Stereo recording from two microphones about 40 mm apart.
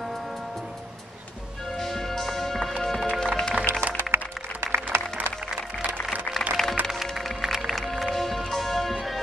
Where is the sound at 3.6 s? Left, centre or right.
Right.